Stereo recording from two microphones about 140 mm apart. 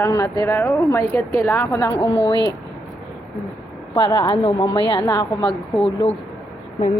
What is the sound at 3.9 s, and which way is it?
A woman's voice, 30° left (ahead or behind).